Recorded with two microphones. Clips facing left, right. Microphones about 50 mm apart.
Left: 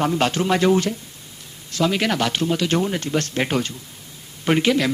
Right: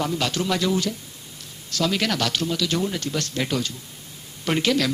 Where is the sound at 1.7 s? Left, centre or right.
Left.